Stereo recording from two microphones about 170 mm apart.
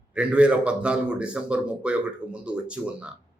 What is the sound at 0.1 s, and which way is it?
A man's voice, 5° right (ahead or behind).